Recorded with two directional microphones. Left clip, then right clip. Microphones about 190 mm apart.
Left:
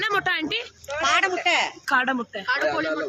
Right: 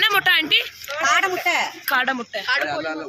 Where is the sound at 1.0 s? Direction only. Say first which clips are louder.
Right 2 dB; 25° right (ahead or behind).